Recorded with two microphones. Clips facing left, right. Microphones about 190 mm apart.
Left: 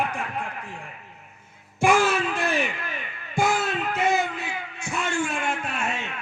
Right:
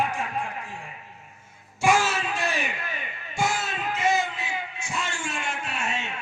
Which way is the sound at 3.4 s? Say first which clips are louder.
Left 4 dB; 55° left (ahead or behind).